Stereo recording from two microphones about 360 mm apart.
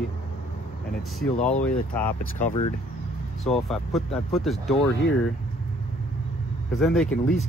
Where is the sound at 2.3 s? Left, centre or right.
Centre.